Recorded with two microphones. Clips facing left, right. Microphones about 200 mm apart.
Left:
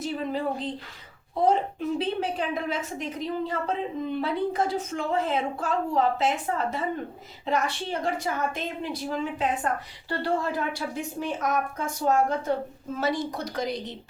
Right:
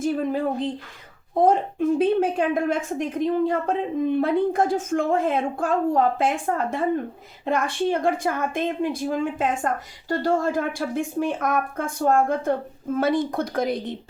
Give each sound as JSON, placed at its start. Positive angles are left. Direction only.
{"t": 0.0, "sound": "a woman's voice", "side_deg": -50}